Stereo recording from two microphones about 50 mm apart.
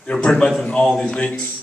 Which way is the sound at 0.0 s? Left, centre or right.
Centre.